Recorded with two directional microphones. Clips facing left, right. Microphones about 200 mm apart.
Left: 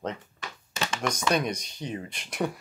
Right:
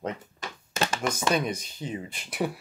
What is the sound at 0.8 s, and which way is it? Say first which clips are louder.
Computer keyboard: right 2 dB; 45° right (ahead or behind).